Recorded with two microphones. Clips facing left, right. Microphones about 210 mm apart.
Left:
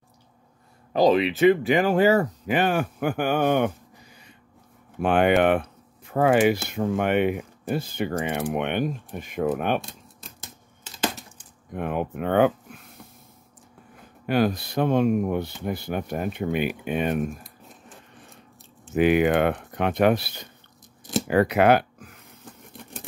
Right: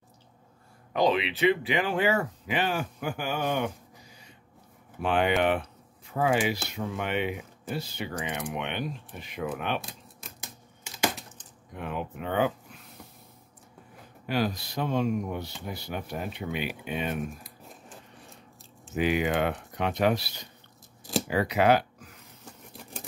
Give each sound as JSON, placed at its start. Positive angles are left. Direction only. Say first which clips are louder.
{"t": 0.9, "sound": "speech", "louder": "left 6 dB", "side_deg": 40}
{"t": 9.8, "sound": "keys jangling", "louder": "left 5 dB", "side_deg": 0}
{"t": 11.7, "sound": "speech", "louder": "left 7 dB", "side_deg": 55}
{"t": 14.2, "sound": "speech", "louder": "left 6 dB", "side_deg": 55}
{"t": 17.1, "sound": "a sound", "louder": "left 7 dB", "side_deg": 0}
{"t": 18.9, "sound": "speech", "louder": "left 7 dB", "side_deg": 55}
{"t": 22.4, "sound": "tearing", "louder": "left 3 dB", "side_deg": 0}